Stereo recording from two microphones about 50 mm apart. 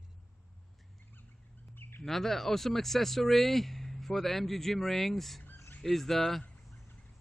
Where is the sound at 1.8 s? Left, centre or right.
Left.